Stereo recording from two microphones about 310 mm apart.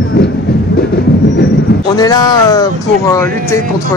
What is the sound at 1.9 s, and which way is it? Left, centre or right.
Speech, centre.